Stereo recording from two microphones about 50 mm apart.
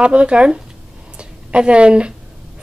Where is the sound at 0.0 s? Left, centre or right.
Right.